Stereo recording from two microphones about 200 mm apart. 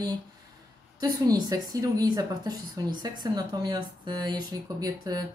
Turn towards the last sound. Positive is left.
turn(degrees=-20)  # may be behind; listen again after turning